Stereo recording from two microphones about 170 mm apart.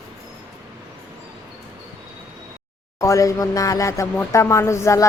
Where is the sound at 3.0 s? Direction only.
20° left (ahead or behind).